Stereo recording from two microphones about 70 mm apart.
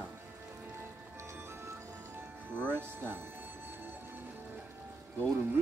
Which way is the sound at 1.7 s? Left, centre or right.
Right.